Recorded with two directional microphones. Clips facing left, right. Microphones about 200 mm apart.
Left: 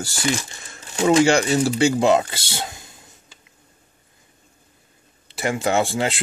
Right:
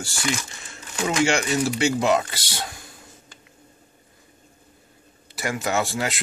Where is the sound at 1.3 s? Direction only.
30° left (ahead or behind).